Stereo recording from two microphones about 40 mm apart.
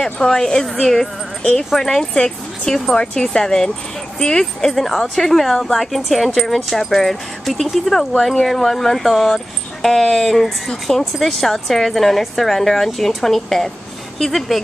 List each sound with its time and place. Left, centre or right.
0.0 s a woman's voice: centre